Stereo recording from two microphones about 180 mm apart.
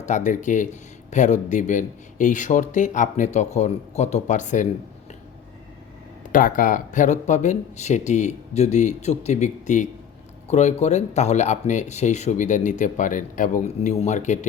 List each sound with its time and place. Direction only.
0.0 s speech: 45° left (ahead or behind)
6.3 s speech: 50° left (ahead or behind)